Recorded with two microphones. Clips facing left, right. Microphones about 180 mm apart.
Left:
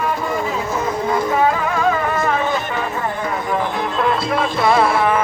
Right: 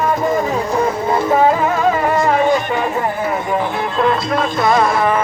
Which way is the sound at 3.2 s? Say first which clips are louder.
Right 3 dB; 5° right (ahead or behind).